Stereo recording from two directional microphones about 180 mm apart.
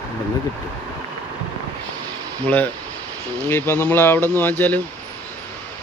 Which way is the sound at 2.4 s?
10° left (ahead or behind).